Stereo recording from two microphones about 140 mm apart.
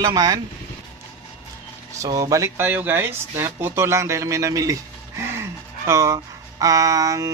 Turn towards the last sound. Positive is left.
turn(degrees=-25)  # may be behind; listen again after turning